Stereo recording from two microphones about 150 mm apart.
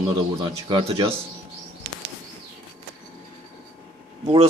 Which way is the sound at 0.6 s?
35° right (ahead or behind).